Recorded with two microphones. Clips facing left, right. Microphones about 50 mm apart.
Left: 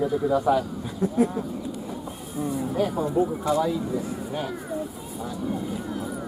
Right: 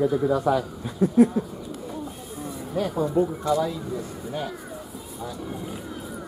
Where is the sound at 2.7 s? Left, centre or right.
Centre.